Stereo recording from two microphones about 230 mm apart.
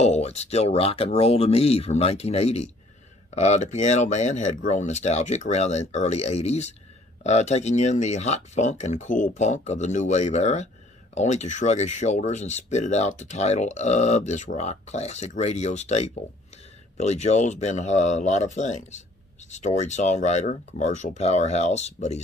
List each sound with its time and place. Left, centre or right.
0.0 s speech: left